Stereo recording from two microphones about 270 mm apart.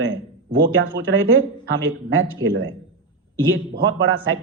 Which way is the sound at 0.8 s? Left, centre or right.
Right.